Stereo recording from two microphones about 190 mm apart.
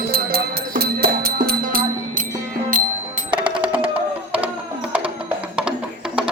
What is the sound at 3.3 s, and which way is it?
Music, 25° right (ahead or behind).